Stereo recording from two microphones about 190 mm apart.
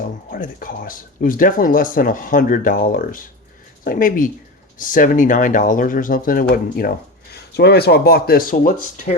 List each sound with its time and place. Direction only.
0.0 s speech: 45° left (ahead or behind)